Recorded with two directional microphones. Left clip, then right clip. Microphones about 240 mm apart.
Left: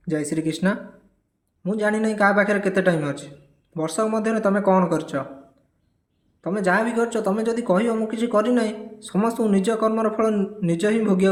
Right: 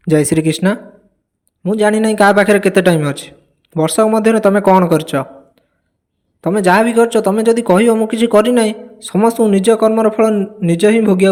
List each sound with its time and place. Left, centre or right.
0.0 s a man's voice: right